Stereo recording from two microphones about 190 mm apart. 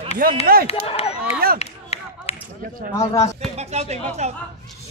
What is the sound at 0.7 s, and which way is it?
Speech, 30° left (ahead or behind).